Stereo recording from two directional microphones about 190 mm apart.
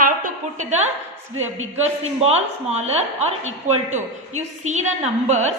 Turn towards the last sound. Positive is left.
turn(degrees=-35)  # may be behind; listen again after turning